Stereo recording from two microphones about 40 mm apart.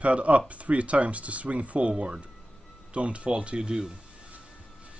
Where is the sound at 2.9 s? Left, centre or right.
Right.